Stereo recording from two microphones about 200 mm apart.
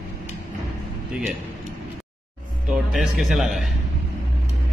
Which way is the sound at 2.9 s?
Centre (ahead or behind).